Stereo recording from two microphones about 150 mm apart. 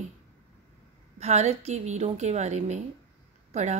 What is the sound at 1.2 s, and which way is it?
A woman's voice, 45° right (ahead or behind).